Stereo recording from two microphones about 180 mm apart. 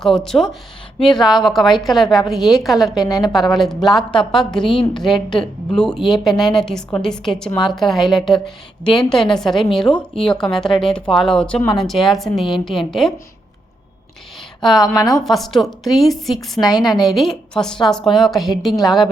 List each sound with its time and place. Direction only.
0.0 s speech: centre (ahead or behind)
3.1 s a woman's voice: 20° left (ahead or behind)
3.3 s speech: centre (ahead or behind)
14.6 s speech: centre (ahead or behind)